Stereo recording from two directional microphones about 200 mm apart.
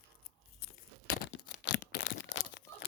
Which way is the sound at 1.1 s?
60° left (ahead or behind).